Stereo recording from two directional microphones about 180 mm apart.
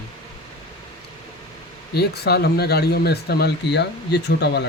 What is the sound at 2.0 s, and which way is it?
Speech, 65° left (ahead or behind).